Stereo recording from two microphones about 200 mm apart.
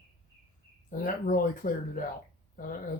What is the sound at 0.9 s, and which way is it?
Speech, 45° left (ahead or behind).